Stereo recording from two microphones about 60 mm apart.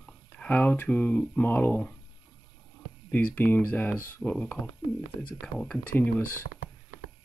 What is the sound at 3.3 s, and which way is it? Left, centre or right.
Speech, left.